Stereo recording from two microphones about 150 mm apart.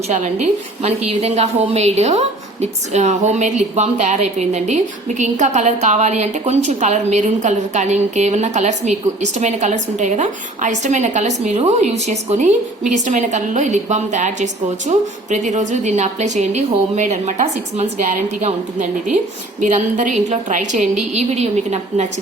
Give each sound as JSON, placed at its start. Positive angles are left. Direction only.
{"t": 0.1, "sound": "a woman's voice", "side_deg": -50}